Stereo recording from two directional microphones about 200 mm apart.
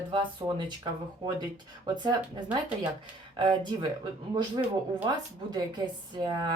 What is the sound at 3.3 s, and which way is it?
A woman's voice, 25° right (ahead or behind).